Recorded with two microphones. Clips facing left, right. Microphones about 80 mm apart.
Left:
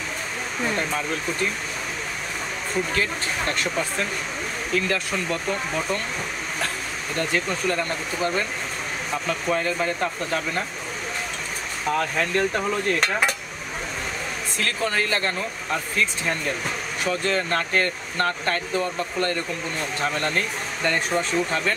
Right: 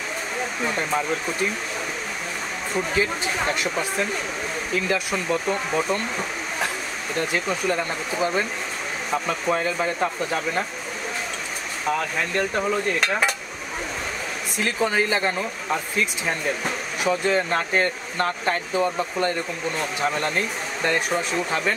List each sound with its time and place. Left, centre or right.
2.9 s speech: centre
7.2 s speech: centre
12.4 s cutlery: centre
14.6 s speech: centre